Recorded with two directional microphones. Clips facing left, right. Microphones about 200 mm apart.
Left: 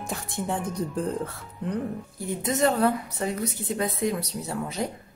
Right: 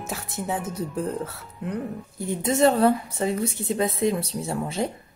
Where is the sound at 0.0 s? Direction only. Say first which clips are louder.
Even; 5° right (ahead or behind).